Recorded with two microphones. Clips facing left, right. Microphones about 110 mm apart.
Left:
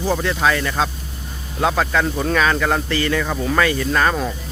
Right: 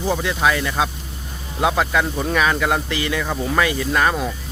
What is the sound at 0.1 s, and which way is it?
Speech, 10° right (ahead or behind).